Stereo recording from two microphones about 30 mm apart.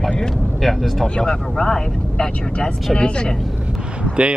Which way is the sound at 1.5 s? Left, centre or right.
Left.